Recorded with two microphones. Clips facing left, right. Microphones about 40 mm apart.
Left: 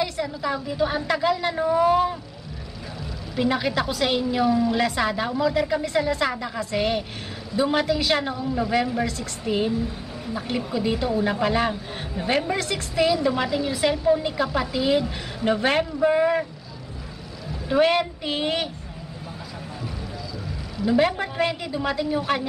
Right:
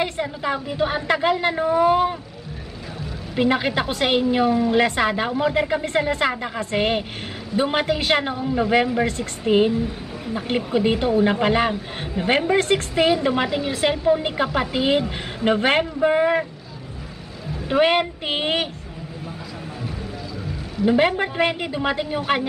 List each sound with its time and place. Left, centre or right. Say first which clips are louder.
0.0 s a woman's voice: right 2 dB; right
3.3 s a woman's voice: right 3 dB; right
10.5 s a woman's voice: right 5 dB; right
17.6 s a woman's voice: right 2 dB; right
21.1 s a woman's voice: right 3 dB; right